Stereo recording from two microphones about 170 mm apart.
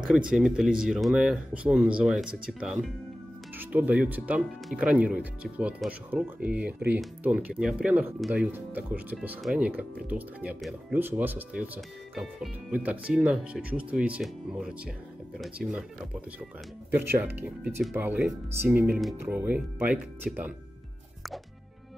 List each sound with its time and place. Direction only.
0.0 s speech: 5° right (ahead or behind)
16.9 s speech: 10° right (ahead or behind)